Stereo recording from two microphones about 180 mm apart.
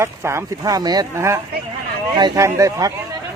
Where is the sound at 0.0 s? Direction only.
15° right (ahead or behind).